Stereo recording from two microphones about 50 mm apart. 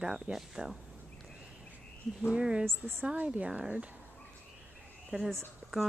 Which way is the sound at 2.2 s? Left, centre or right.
Right.